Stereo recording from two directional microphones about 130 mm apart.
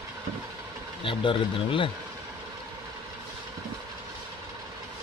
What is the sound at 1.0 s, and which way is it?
Speech, 40° left (ahead or behind).